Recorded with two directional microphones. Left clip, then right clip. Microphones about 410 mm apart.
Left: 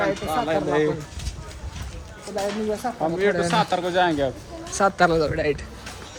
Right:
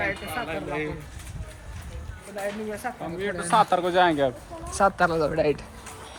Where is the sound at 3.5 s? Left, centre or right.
Centre.